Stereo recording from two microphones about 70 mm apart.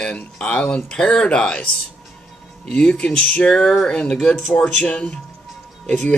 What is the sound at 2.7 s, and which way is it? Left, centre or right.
Speech, centre.